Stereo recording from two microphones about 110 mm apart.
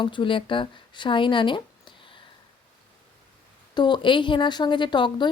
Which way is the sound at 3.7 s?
45° left (ahead or behind).